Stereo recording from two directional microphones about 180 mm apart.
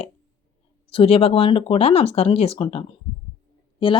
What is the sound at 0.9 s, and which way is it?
Speech, 30° left (ahead or behind).